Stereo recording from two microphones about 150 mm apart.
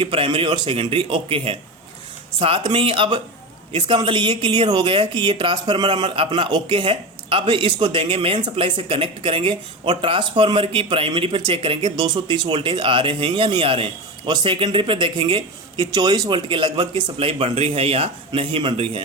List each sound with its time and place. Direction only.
0.0 s speech: 35° right (ahead or behind)